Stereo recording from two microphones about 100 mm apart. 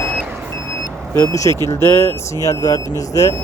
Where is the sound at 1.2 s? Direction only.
35° left (ahead or behind).